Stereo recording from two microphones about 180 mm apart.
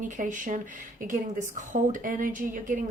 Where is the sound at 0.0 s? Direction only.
45° right (ahead or behind).